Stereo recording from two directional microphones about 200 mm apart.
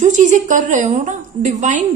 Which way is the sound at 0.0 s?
40° right (ahead or behind).